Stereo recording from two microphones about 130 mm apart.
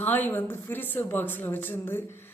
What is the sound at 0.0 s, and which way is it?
A woman's voice, 15° left (ahead or behind).